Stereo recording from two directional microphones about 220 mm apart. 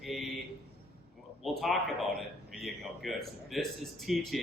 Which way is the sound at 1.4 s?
Centre (ahead or behind).